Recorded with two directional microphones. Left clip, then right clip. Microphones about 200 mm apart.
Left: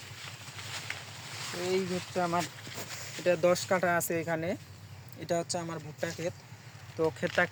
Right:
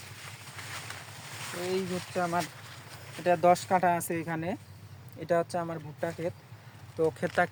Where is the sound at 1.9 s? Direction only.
5° right (ahead or behind).